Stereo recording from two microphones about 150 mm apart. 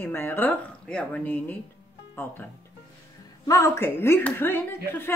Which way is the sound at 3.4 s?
20° left (ahead or behind).